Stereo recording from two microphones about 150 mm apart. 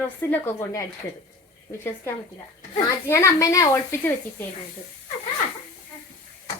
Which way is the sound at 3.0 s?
20° left (ahead or behind).